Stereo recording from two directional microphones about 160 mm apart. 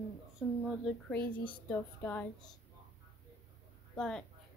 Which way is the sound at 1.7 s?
10° left (ahead or behind).